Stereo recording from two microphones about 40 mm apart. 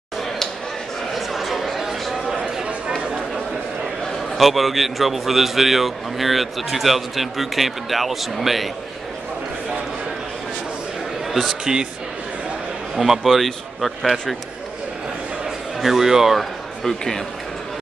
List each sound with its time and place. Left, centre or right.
1.1 s a sound: centre
2.3 s a sound: right
4.4 s a man's voice: centre
11.6 s a man's voice: centre
12.9 s a man's voice: centre
15.8 s a man's voice: centre